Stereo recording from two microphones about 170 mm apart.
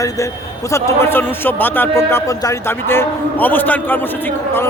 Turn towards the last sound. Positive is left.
turn(degrees=10)  # may be behind; listen again after turning